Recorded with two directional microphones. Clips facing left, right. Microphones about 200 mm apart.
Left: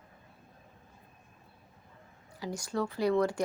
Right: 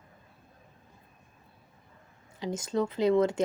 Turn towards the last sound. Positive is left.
turn(degrees=-20)  # may be behind; listen again after turning